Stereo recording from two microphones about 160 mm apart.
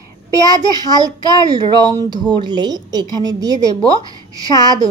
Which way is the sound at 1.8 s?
25° right (ahead or behind).